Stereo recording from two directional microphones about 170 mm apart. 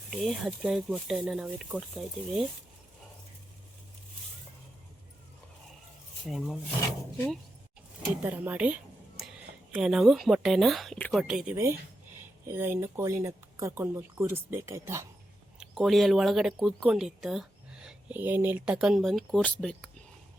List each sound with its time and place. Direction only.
0.1 s speech: centre (ahead or behind)
6.2 s speech: centre (ahead or behind)
8.2 s speech: 10° right (ahead or behind)
11.5 s speech: 15° right (ahead or behind)
15.5 s speech: 5° right (ahead or behind)